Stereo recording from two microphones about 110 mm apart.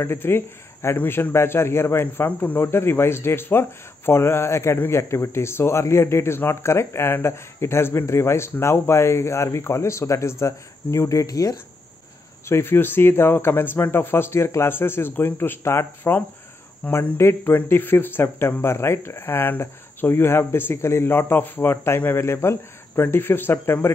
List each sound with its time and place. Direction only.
0.0 s speech: 20° left (ahead or behind)
12.4 s speech: 20° left (ahead or behind)